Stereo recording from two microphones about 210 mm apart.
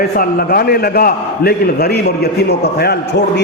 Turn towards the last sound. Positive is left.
turn(degrees=50)  # may be behind; listen again after turning